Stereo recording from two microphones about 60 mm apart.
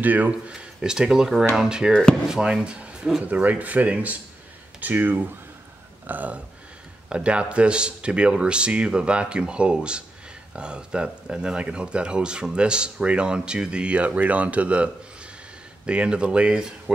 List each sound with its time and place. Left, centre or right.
0.0 s speech: right
0.5 s speech: centre